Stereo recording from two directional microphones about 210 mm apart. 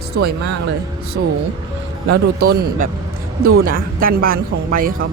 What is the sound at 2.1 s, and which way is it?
Speech, 45° right (ahead or behind).